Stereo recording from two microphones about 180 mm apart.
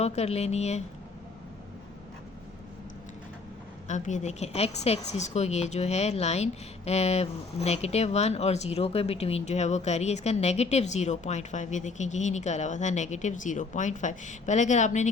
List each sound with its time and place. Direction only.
0.0 s a woman's voice: 35° left (ahead or behind)
3.8 s a woman's voice: 40° left (ahead or behind)